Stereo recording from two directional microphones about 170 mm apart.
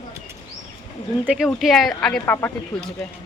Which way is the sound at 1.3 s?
Centre (ahead or behind).